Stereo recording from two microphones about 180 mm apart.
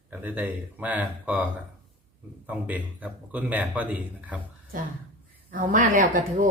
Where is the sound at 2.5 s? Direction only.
10° right (ahead or behind).